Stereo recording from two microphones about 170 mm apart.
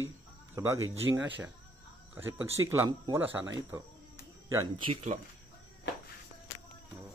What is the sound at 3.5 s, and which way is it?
Speech, 25° right (ahead or behind).